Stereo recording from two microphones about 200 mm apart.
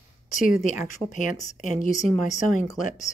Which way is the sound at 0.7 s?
40° left (ahead or behind).